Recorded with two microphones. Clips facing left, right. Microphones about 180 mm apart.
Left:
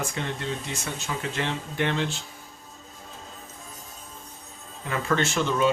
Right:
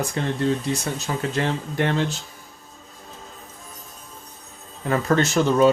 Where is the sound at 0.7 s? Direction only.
40° right (ahead or behind).